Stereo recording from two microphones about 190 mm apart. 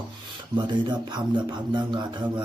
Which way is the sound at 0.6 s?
20° right (ahead or behind).